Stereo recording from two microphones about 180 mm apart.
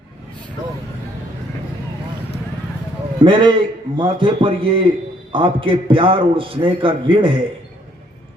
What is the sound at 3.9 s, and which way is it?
A man's voice, 25° right (ahead or behind).